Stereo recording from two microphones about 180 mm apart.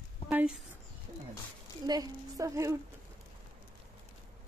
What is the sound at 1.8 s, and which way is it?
Speech, 20° right (ahead or behind).